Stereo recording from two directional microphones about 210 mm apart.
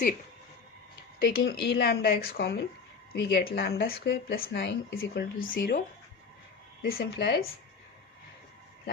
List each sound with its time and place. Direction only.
1.2 s speech: 45° left (ahead or behind)
6.8 s speech: 45° left (ahead or behind)